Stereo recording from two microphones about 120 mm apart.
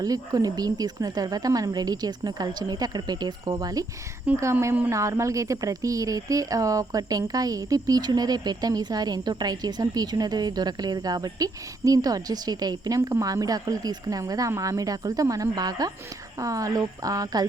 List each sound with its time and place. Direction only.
0.0 s speech: 30° right (ahead or behind)
4.3 s speech: 10° right (ahead or behind); by 17.4 s 30° right (ahead or behind)